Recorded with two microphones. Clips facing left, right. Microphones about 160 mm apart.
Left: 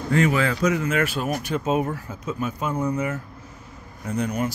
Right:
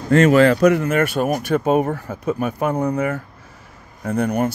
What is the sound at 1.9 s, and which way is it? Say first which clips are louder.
Speech: right 7 dB; 65° right (ahead or behind).